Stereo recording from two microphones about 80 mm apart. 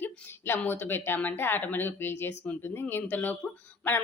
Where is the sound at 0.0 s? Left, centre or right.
Left.